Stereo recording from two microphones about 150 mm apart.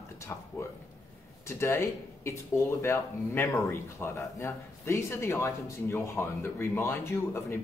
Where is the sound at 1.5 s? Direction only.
15° left (ahead or behind).